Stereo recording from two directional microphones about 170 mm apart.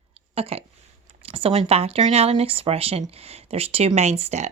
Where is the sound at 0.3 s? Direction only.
35° right (ahead or behind).